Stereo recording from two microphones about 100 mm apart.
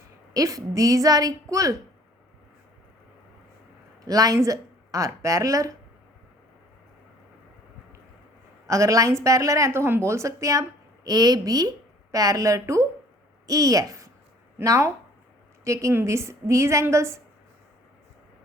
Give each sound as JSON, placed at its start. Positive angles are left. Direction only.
{"t": 0.3, "sound": "speech", "side_deg": -35}
{"t": 4.0, "sound": "speech", "side_deg": -35}
{"t": 8.6, "sound": "a woman's voice", "side_deg": -30}